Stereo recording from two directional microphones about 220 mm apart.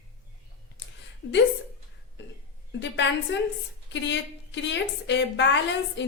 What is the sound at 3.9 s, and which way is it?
A woman's voice, 55° left (ahead or behind).